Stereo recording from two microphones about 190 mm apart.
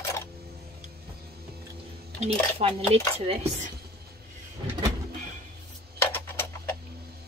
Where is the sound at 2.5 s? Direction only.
30° right (ahead or behind).